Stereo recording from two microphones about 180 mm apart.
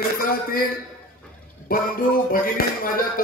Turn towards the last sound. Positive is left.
turn(degrees=50)  # may be behind; listen again after turning